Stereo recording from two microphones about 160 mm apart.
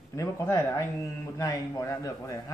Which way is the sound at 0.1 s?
20° left (ahead or behind).